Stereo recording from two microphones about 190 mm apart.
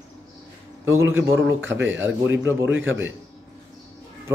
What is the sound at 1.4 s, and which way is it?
Speech, 75° right (ahead or behind).